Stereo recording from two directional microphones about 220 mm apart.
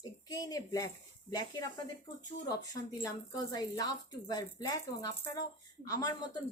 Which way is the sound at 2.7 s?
15° left (ahead or behind).